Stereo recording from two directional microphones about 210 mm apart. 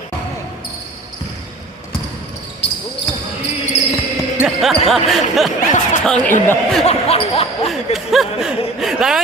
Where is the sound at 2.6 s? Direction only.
55° left (ahead or behind).